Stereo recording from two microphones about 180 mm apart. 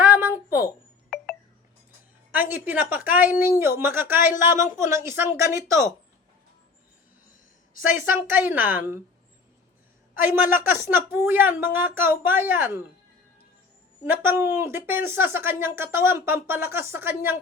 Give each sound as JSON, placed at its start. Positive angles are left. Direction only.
{"t": 0.0, "sound": "a sound", "side_deg": -10}
{"t": 1.1, "sound": "telephone dialing", "side_deg": 0}
{"t": 2.5, "sound": "speech", "side_deg": -10}
{"t": 7.9, "sound": "speech", "side_deg": -10}
{"t": 10.5, "sound": "speech", "side_deg": -10}
{"t": 14.0, "sound": "speech", "side_deg": -10}